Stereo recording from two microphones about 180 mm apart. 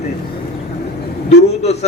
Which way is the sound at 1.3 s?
35° left (ahead or behind).